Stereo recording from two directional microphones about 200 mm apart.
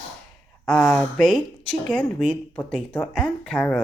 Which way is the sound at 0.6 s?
5° left (ahead or behind).